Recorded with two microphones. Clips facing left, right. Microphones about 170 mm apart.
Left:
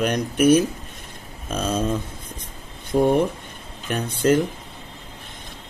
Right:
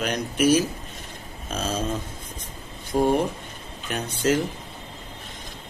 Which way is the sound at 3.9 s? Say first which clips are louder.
Left 4 dB; 55° left (ahead or behind).